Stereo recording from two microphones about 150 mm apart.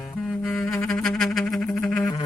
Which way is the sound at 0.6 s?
Centre (ahead or behind).